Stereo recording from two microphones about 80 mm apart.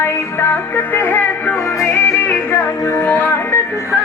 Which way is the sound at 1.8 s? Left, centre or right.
Left.